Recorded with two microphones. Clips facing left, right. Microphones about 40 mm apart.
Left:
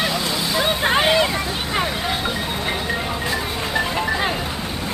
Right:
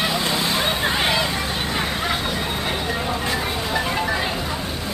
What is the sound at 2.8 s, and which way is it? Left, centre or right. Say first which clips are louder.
Music: even; centre.